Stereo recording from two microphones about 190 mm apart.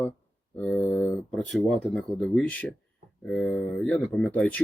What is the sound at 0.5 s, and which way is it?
Speech, 10° left (ahead or behind).